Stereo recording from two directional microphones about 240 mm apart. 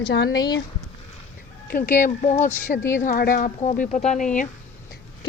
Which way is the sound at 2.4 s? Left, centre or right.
Centre.